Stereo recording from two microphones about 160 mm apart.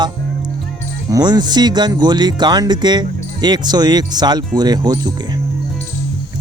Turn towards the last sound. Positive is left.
turn(degrees=-25)  # may be behind; listen again after turning